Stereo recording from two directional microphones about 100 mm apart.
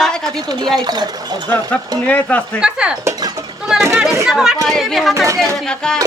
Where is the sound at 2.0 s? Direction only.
15° left (ahead or behind).